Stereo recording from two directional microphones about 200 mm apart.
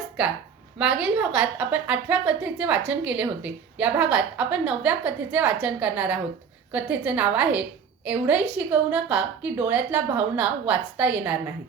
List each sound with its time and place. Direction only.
0.8 s a woman's voice: 5° right (ahead or behind)